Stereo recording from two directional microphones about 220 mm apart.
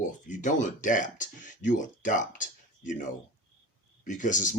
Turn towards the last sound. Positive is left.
turn(degrees=35)  # may be behind; listen again after turning